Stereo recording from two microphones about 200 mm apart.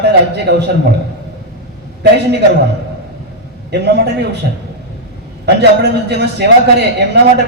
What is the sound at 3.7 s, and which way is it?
Speech, 55° right (ahead or behind).